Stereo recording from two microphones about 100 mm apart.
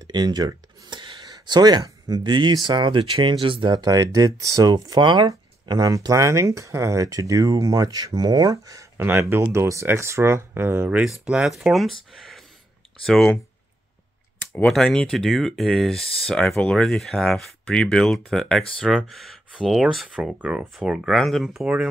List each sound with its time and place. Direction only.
0.0 s speech: 45° right (ahead or behind)
0.8 s a sound: 50° right (ahead or behind)
2.8 s speech: 55° right (ahead or behind)
3.7 s speech: 35° right (ahead or behind)
5.0 s speech: 50° right (ahead or behind); by 9.0 s 35° right (ahead or behind)
9.0 s speech: 25° right (ahead or behind)
10.9 s speech: 10° right (ahead or behind)
14.5 s speech: 5° left (ahead or behind)